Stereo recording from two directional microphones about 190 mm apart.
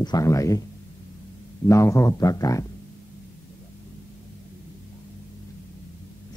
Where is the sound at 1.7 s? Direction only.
15° left (ahead or behind).